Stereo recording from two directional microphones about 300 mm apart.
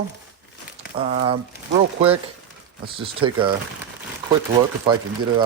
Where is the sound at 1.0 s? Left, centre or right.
Centre.